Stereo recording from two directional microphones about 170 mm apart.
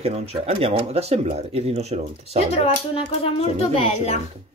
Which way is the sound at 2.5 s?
35° left (ahead or behind).